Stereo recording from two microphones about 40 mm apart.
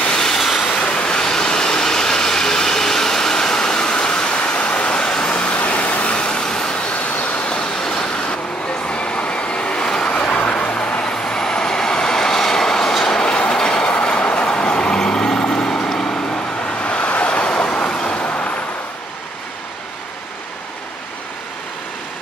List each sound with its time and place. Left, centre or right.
0.0 s train: centre
0.7 s vehicle: left
6.1 s vehicle: left
7.2 s vehicle: left
7.8 s vehicle: centre
10.0 s train: left
15.4 s vehicle: left
16.8 s vehicle: left